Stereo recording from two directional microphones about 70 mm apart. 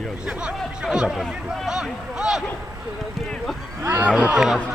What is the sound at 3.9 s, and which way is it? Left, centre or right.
Speech, right.